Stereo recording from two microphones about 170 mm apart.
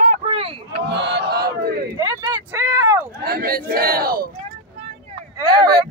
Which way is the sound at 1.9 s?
25° right (ahead or behind).